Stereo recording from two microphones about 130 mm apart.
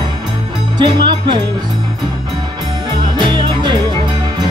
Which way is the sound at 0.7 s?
40° right (ahead or behind).